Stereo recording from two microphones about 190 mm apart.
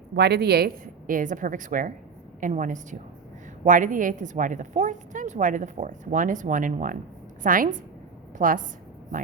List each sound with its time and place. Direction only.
0.2 s a woman's voice: 60° right (ahead or behind); by 8.6 s 45° right (ahead or behind)